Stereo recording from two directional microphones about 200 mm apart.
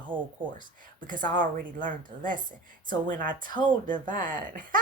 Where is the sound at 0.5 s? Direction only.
40° right (ahead or behind).